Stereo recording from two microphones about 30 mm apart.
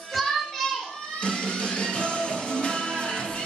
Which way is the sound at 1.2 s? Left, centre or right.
Left.